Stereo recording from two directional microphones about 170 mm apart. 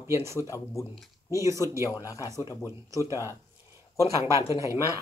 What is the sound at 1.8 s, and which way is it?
Speech, 20° left (ahead or behind).